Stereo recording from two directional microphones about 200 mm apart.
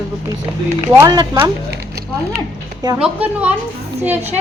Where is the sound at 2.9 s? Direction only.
5° right (ahead or behind).